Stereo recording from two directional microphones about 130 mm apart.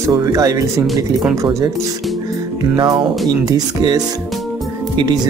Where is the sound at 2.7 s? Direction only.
35° right (ahead or behind).